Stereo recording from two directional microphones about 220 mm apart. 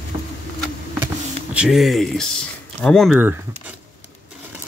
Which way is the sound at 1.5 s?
5° right (ahead or behind).